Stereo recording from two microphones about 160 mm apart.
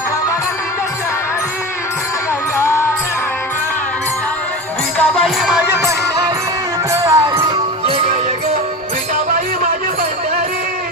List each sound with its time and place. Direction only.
2.6 s music: 15° left (ahead or behind)
4.9 s music: 5° left (ahead or behind)
5.7 s music: 15° right (ahead or behind); by 8.2 s 40° right (ahead or behind)